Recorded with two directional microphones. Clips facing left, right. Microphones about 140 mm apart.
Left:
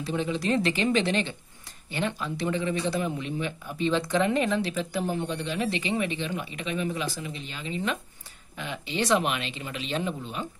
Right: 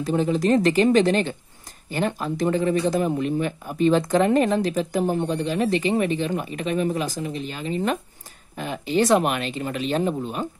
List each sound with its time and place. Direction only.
0.0 s speech: 45° right (ahead or behind)